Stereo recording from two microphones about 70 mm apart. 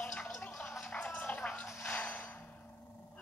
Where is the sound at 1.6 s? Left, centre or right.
Left.